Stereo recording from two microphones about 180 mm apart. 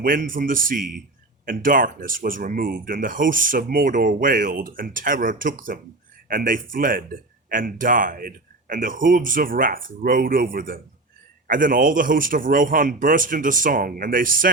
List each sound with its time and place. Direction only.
0.0 s speech: 50° right (ahead or behind)